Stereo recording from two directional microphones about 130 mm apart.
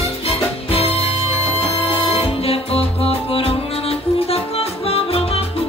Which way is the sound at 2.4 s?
50° left (ahead or behind).